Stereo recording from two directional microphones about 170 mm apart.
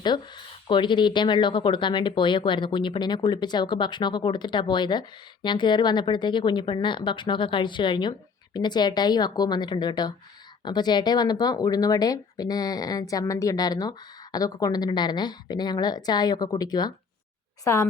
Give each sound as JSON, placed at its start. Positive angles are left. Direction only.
{"t": 0.0, "sound": "speech", "side_deg": 25}